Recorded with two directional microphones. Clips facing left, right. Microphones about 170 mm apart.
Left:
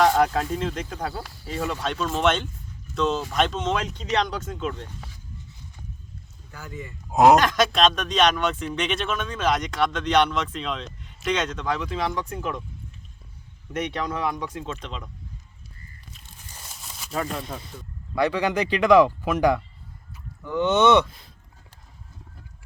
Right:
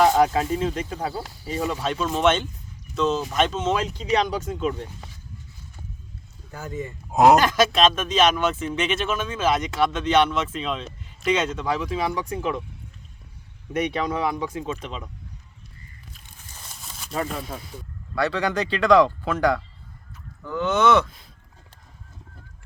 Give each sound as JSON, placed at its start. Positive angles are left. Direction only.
{"t": 0.0, "sound": "speech", "side_deg": -5}
{"t": 6.5, "sound": "speech", "side_deg": -25}
{"t": 7.1, "sound": "speech", "side_deg": 0}
{"t": 13.7, "sound": "speech", "side_deg": -10}
{"t": 16.6, "sound": "a sound", "side_deg": 5}
{"t": 18.1, "sound": "speech", "side_deg": 15}